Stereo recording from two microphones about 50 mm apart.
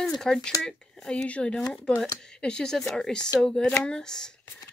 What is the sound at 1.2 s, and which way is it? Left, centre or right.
Speech, left.